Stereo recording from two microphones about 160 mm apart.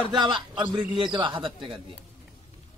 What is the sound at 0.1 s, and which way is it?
A man's voice, 30° right (ahead or behind).